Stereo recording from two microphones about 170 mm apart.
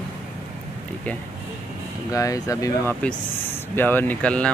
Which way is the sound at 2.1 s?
20° left (ahead or behind).